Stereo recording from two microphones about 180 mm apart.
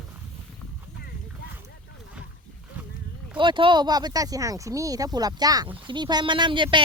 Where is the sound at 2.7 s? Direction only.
10° right (ahead or behind).